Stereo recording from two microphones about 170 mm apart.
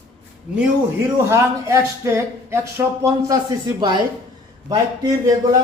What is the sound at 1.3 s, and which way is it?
Speech, 15° right (ahead or behind).